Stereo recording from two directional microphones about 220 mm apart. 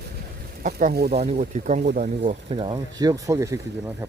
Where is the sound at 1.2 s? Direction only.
30° right (ahead or behind); by 3.5 s 15° right (ahead or behind).